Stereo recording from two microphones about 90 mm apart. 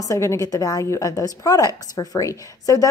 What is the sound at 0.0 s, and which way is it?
A woman's voice, 35° left (ahead or behind).